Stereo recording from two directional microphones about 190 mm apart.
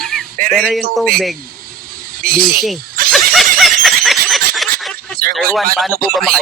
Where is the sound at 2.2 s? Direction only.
50° right (ahead or behind).